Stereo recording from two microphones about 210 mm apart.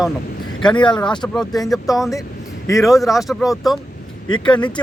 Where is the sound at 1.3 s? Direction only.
Centre (ahead or behind).